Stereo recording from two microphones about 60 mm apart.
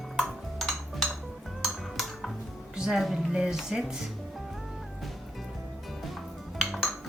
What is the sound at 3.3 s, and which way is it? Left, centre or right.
Speech, centre.